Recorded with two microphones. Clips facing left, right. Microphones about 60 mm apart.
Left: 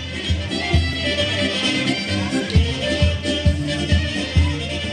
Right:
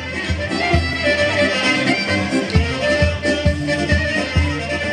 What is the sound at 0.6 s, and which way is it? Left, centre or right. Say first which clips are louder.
Music: right 5 dB; right.